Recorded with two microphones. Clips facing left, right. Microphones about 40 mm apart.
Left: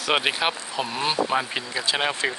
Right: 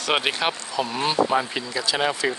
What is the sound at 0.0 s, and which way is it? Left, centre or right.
Speech, centre.